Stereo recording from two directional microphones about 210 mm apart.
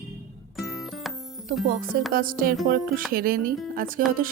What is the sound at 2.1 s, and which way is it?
Speech, 45° right (ahead or behind).